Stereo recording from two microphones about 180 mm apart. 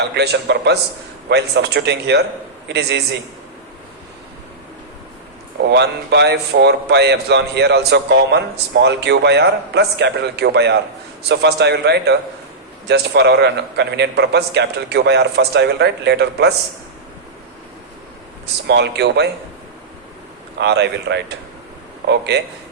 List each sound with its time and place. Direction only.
0.1 s a man's voice: 70° right (ahead or behind)
5.6 s a man's voice: 70° right (ahead or behind)
18.7 s a man's voice: 70° right (ahead or behind)
20.6 s a man's voice: 70° right (ahead or behind)